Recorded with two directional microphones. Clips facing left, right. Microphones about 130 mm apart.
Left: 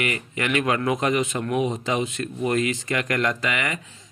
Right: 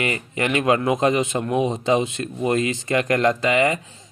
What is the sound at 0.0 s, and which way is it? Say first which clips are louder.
Speech: right 3 dB; 30° right (ahead or behind).